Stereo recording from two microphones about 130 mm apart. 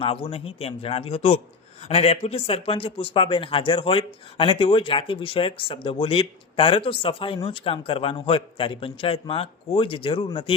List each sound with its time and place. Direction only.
0.0 s a man's voice: 45° left (ahead or behind)